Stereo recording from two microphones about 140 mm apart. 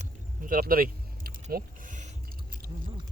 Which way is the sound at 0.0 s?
80° right.